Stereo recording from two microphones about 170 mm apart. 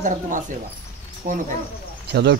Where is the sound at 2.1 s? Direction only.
80° right.